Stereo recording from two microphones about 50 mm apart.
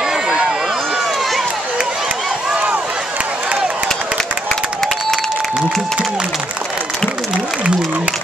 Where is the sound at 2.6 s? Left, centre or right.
Right.